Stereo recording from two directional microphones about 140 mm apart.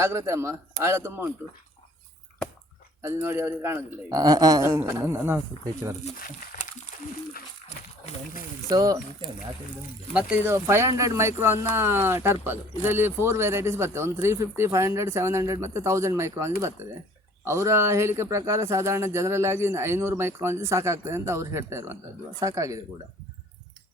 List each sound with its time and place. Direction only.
0.0 s a man's voice: 20° right (ahead or behind)
3.0 s a man's voice: 20° right (ahead or behind)
4.1 s speech: 25° right (ahead or behind)
6.1 s speech: 90° left
8.7 s speech: 25° right (ahead or behind)
10.3 s speech: 20° right (ahead or behind)